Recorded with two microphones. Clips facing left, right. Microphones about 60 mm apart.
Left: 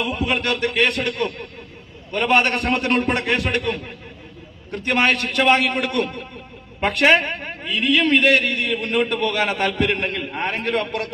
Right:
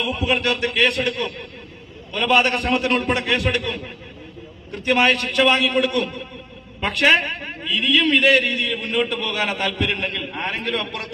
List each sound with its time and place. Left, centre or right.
0.1 s a man's voice: left